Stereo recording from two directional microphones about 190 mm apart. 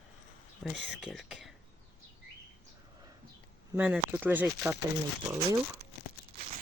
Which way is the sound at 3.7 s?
10° right (ahead or behind).